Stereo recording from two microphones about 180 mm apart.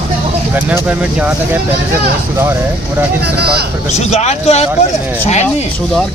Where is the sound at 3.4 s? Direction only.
65° right (ahead or behind).